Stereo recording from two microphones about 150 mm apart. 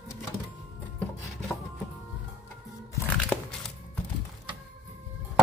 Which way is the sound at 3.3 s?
10° left (ahead or behind).